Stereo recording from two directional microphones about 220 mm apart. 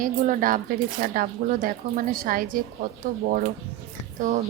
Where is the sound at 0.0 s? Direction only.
40° right (ahead or behind).